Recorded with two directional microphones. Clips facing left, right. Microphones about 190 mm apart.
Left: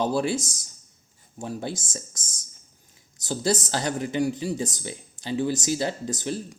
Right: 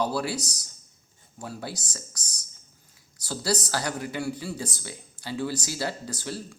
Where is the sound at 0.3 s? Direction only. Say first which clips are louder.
Left 4 dB; 45° left (ahead or behind).